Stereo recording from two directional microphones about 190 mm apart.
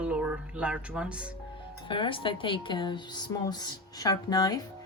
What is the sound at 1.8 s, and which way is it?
A woman's voice, 25° left (ahead or behind).